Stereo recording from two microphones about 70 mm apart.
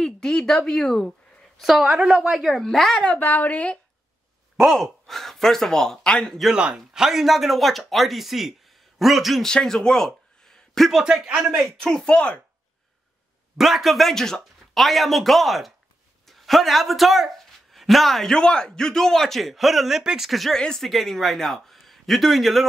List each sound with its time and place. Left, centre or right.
0.0 s a woman's voice: centre
2.5 s speech: centre
3.0 s a woman's voice: centre
4.6 s speech: centre
6.5 s speech: centre
9.5 s a sound: centre
10.9 s speech: centre
11.7 s speech: centre
13.6 s speech: centre